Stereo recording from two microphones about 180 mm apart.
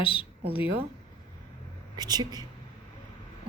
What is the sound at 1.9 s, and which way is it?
Speech, 20° right (ahead or behind).